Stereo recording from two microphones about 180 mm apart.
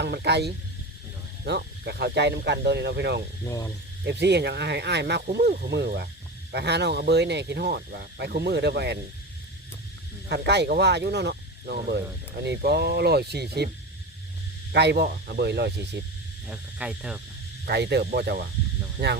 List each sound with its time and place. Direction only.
0.0 s speech: 65° right (ahead or behind)
3.4 s speech: 15° left (ahead or behind)
4.0 s speech: 70° right (ahead or behind)
10.2 s speech: 70° right (ahead or behind)
14.7 s speech: 70° right (ahead or behind)
16.5 s cricket: 5° right (ahead or behind)
17.7 s speech: 65° right (ahead or behind)